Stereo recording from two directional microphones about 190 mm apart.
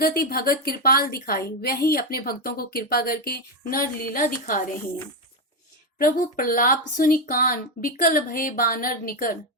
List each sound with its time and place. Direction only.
0.0 s speech: 50° left (ahead or behind)
6.0 s speech: 50° left (ahead or behind)